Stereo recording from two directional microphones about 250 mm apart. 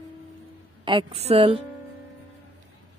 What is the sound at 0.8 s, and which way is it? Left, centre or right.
Music, centre.